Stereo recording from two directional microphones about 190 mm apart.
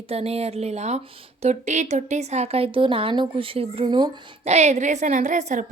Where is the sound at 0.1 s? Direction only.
35° right (ahead or behind).